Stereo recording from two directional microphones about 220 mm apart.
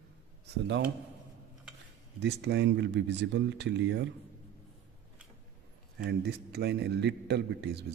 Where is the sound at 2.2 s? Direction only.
50° right (ahead or behind).